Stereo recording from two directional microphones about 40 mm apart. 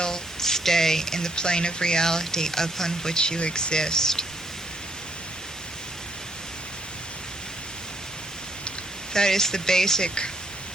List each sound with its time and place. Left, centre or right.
0.0 s speech: centre
9.1 s speech: centre